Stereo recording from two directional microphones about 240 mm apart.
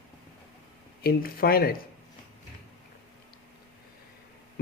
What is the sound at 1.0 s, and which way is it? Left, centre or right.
Speech, left.